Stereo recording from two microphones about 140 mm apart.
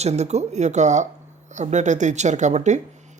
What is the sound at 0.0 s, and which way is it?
Speech, 55° right (ahead or behind).